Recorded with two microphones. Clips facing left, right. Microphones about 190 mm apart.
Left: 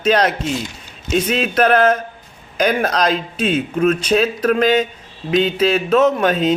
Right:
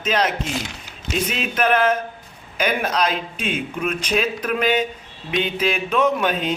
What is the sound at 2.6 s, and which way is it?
Speech, 35° left (ahead or behind).